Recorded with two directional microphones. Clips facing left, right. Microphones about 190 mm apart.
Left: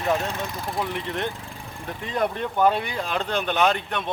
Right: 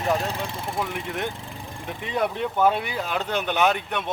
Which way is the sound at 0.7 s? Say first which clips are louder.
Left 2 dB; 5° right (ahead or behind).